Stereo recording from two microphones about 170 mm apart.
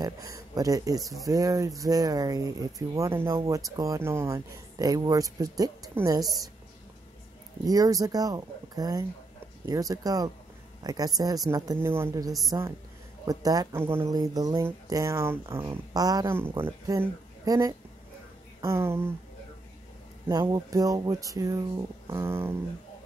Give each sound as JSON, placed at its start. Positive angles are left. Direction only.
{"t": 0.0, "sound": "speech", "side_deg": -20}
{"t": 7.6, "sound": "speech", "side_deg": -20}
{"t": 20.2, "sound": "speech", "side_deg": -20}